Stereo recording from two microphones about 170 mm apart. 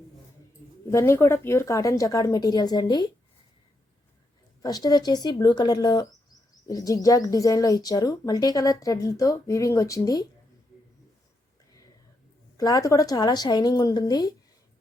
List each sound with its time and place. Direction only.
0.9 s speech: 15° left (ahead or behind)
4.6 s speech: 25° left (ahead or behind)
12.5 s speech: 20° left (ahead or behind)